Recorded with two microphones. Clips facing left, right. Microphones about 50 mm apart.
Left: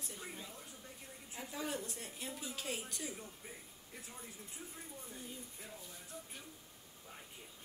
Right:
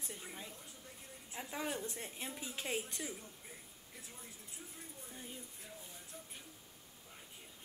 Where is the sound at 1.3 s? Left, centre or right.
Right.